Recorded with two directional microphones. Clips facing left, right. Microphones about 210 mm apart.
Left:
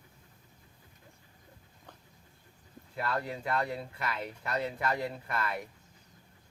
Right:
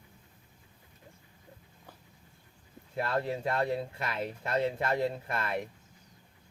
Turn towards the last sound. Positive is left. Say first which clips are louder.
# right 2 dB
turn(degrees=-25)  # may be behind; listen again after turning